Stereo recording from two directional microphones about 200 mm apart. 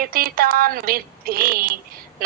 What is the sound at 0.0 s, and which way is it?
Female singing, 45° right (ahead or behind).